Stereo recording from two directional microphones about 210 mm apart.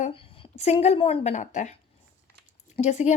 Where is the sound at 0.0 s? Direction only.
25° left (ahead or behind).